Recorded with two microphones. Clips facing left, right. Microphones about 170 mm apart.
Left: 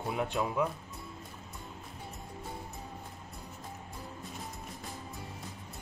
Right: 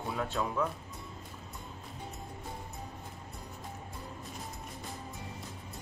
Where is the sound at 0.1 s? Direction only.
15° left (ahead or behind).